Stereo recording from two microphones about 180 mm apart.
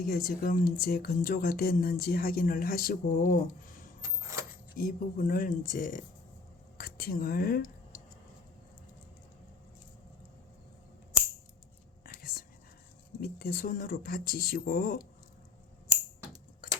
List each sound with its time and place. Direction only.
0.0 s speech: 55° left (ahead or behind)
4.0 s a sound: 15° right (ahead or behind)
4.7 s speech: 50° left (ahead or behind)
6.7 s whispering: 60° left (ahead or behind)
12.0 s whispering: 55° left (ahead or behind)
13.1 s speech: 60° left (ahead or behind)